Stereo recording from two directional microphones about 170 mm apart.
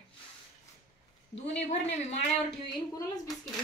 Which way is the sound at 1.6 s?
40° left (ahead or behind).